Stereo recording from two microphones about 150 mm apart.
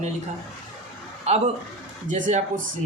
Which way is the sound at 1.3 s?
45° right (ahead or behind).